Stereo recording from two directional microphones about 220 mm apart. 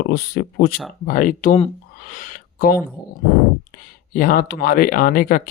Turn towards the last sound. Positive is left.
turn(degrees=40)  # may be behind; listen again after turning